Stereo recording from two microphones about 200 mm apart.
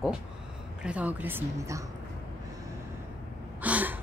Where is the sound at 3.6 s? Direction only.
10° right (ahead or behind).